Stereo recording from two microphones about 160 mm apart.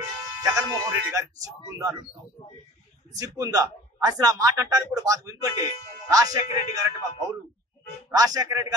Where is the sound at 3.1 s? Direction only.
20° right (ahead or behind).